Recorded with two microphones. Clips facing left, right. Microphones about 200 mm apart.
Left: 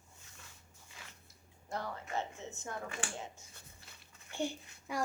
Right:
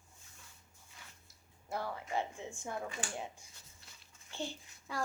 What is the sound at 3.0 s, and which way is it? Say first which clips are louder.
Speech: even; 70° left (ahead or behind).